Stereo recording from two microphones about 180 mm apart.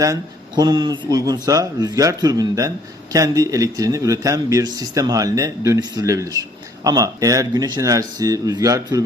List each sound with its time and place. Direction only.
0.0 s speech: 20° right (ahead or behind)